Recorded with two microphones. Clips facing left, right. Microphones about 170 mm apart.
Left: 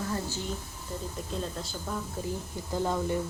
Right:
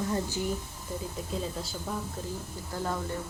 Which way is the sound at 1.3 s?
Centre (ahead or behind).